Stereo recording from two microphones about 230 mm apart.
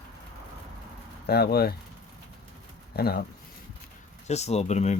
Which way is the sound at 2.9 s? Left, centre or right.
Left.